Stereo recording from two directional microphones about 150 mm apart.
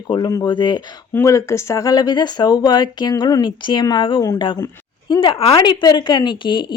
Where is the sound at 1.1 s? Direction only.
20° left (ahead or behind).